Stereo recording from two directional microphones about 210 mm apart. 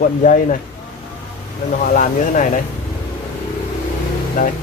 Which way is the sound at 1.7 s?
40° left (ahead or behind).